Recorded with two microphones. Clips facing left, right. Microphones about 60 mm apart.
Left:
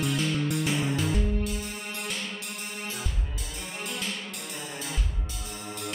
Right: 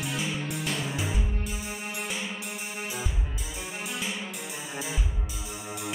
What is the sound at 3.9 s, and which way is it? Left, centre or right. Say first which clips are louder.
Music: right 1 dB; centre.